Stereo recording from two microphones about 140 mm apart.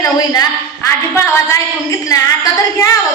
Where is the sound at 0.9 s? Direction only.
20° left (ahead or behind).